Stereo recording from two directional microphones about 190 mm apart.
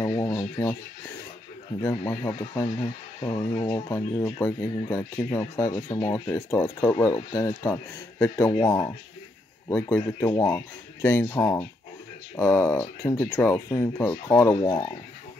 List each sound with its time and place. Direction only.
0.0 s a sound: 20° left (ahead or behind)
1.8 s speech: 15° left (ahead or behind)
14.5 s speech: 25° left (ahead or behind)